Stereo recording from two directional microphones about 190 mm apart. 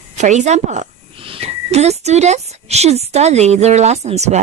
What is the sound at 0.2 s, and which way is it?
A woman's voice, 40° right (ahead or behind).